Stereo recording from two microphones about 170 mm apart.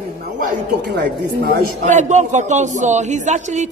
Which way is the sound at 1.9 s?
45° right (ahead or behind).